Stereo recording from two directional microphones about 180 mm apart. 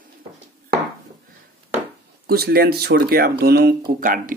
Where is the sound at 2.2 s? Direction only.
60° right (ahead or behind).